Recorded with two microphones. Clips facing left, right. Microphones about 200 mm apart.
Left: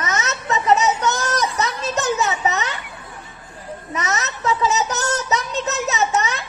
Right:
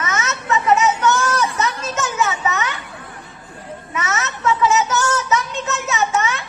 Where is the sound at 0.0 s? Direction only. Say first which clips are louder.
Even; 35° left (ahead or behind).